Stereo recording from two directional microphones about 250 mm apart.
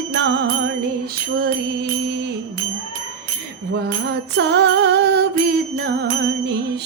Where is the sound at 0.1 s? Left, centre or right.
Right.